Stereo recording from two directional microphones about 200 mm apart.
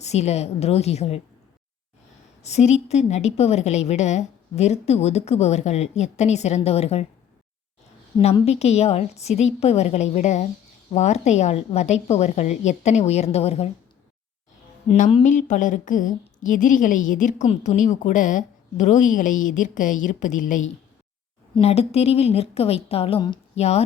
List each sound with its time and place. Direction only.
0.0 s a woman's voice: 35° left (ahead or behind)
2.4 s a woman's voice: 35° left (ahead or behind)
8.1 s a woman's voice: 25° left (ahead or behind)
14.8 s a woman's voice: 35° left (ahead or behind)